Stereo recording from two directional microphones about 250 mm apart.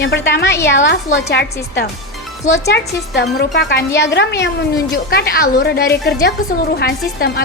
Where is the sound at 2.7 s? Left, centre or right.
Left.